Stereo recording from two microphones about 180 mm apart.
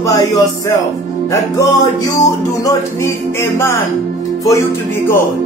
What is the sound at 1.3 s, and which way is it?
Music, 20° left (ahead or behind).